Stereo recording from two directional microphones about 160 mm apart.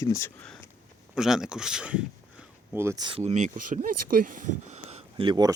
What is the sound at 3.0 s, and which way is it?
Speech, 35° right (ahead or behind).